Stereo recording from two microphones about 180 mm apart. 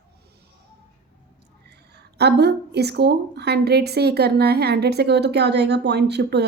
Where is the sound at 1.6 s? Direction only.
65° right (ahead or behind).